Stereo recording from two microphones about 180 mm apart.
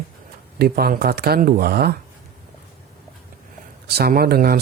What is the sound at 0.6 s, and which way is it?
Speech, 60° right (ahead or behind).